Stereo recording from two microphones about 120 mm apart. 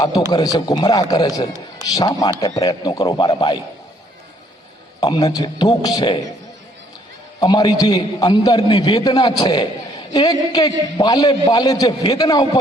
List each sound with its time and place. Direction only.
0.0 s a man's voice: 35° left (ahead or behind)
4.9 s a man's voice: 35° left (ahead or behind)
7.3 s a man's voice: 35° left (ahead or behind)